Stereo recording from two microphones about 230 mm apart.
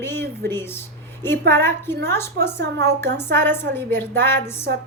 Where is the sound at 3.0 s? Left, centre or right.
Centre.